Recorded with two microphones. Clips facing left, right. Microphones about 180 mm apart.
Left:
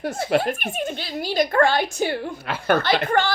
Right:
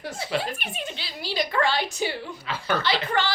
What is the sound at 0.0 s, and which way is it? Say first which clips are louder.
Speech: left 7 dB; 55° left (ahead or behind).